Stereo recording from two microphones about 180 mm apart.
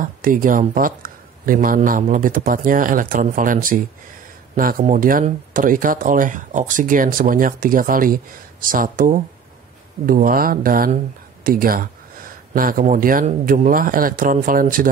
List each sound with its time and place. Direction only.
0.0 s speech: 50° right (ahead or behind)